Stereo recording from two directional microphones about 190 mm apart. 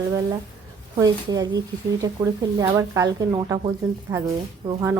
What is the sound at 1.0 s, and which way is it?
Speech, 20° right (ahead or behind).